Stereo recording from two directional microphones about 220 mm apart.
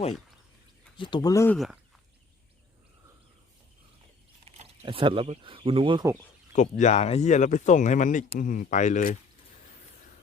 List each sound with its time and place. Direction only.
0.9 s speech: 20° left (ahead or behind)
1.5 s speech: centre (ahead or behind)
4.5 s speech: 30° right (ahead or behind)
6.5 s speech: 35° left (ahead or behind)